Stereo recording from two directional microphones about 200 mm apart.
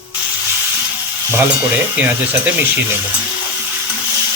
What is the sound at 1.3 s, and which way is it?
Speech, 10° right (ahead or behind).